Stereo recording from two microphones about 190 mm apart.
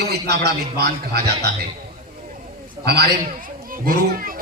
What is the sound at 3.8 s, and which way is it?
Speech, 50° right (ahead or behind).